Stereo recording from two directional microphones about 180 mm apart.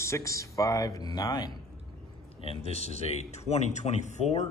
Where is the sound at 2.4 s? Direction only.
35° left (ahead or behind).